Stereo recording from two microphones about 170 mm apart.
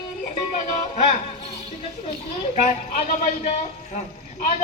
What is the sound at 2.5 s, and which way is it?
Speech, 45° left (ahead or behind).